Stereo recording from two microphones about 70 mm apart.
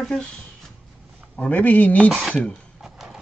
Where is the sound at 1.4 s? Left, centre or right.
Left.